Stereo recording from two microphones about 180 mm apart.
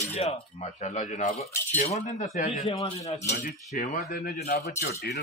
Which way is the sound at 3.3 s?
60° left (ahead or behind).